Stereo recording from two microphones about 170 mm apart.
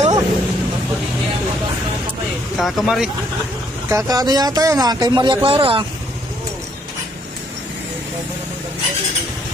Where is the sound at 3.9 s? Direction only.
20° right (ahead or behind).